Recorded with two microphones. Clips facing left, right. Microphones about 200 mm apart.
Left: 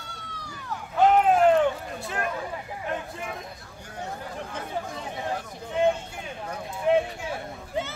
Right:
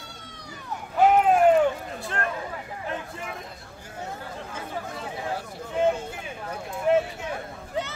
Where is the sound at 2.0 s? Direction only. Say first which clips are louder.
Even; 5° left (ahead or behind).